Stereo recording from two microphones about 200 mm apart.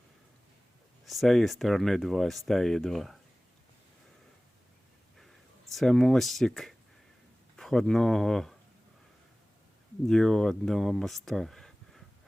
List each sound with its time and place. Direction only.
1.0 s speech: centre (ahead or behind)
5.7 s speech: centre (ahead or behind)
10.1 s speech: centre (ahead or behind)